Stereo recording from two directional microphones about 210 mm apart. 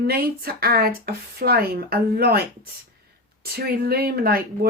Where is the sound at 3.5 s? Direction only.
50° right (ahead or behind).